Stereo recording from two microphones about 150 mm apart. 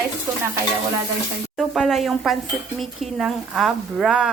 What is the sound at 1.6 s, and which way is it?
Speech, centre (ahead or behind).